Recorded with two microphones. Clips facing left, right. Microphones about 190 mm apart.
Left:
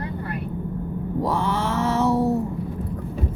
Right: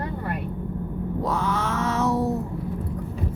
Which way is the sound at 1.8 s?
30° left (ahead or behind).